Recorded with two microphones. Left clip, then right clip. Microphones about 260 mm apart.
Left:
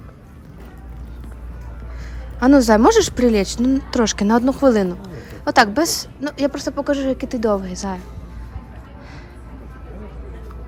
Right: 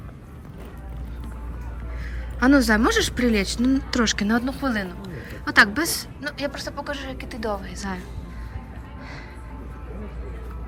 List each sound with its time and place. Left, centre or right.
2.4 s a woman's voice: centre